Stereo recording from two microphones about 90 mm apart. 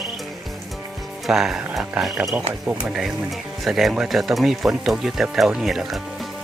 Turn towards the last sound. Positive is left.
turn(degrees=-5)  # may be behind; listen again after turning